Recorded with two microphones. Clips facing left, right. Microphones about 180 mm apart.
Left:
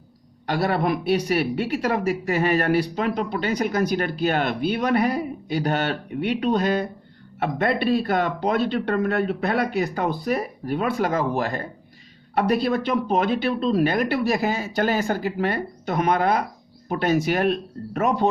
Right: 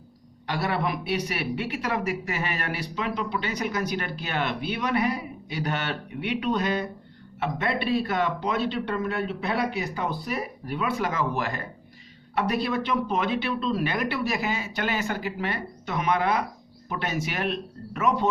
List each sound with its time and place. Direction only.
0.4 s speech: 40° left (ahead or behind)
3.8 s speech: 40° left (ahead or behind)